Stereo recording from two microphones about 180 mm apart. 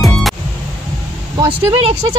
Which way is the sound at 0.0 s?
Centre (ahead or behind).